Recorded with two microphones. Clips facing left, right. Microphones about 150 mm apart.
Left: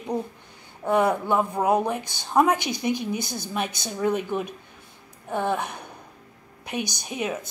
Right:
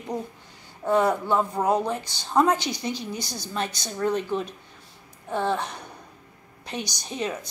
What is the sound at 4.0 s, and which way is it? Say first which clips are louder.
A woman's voice: even; 10° left (ahead or behind).